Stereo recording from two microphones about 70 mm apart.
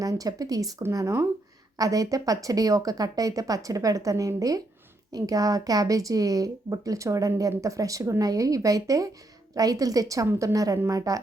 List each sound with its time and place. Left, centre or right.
0.0 s speech: right
0.9 s speech: right
1.8 s speech: right